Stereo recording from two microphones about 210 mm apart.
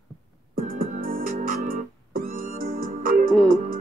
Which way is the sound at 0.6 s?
40° right (ahead or behind).